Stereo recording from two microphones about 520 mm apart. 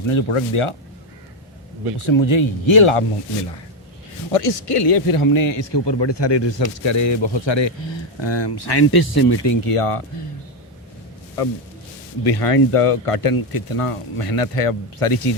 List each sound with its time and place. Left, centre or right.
0.1 s speech: left
2.0 s speech: left
4.3 s speech: left
12.2 s speech: left
12.7 s speech: left